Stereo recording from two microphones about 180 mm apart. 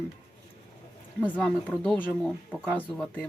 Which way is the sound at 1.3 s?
Centre (ahead or behind).